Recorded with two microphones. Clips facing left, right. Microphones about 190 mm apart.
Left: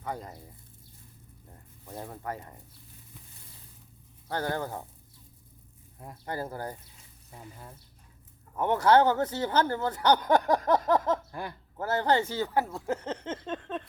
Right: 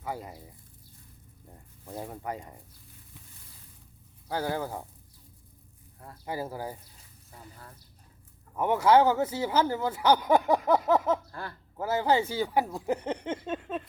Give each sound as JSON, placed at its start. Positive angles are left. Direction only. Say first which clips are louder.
{"t": 0.0, "sound": "speech", "louder": "even", "side_deg": -10}
{"t": 1.9, "sound": "speech", "louder": "right 1 dB", "side_deg": -15}
{"t": 4.3, "sound": "speech", "louder": "right 1 dB", "side_deg": -10}
{"t": 6.2, "sound": "speech", "louder": "right 1 dB", "side_deg": -10}
{"t": 8.5, "sound": "speech", "louder": "even", "side_deg": -10}
{"t": 11.3, "sound": "speech", "louder": "left 2 dB", "side_deg": 15}
{"t": 11.8, "sound": "speech", "louder": "right 1 dB", "side_deg": -10}